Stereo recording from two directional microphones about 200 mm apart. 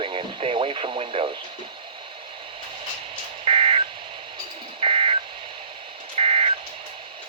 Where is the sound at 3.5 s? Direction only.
30° right (ahead or behind).